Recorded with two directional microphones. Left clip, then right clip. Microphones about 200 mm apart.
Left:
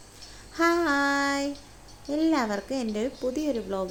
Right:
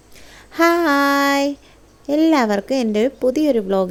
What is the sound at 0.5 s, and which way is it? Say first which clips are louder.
Female singing: right 9 dB; 40° right (ahead or behind).